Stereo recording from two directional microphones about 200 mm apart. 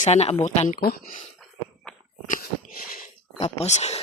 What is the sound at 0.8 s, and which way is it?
Speech, 50° left (ahead or behind).